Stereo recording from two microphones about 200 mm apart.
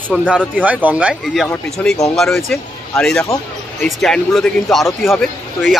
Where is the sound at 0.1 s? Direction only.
5° right (ahead or behind).